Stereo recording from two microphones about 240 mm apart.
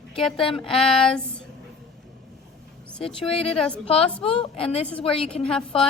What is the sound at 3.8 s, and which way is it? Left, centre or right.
A woman's voice, left.